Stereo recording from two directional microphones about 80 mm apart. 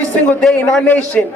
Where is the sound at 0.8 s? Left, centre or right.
Centre.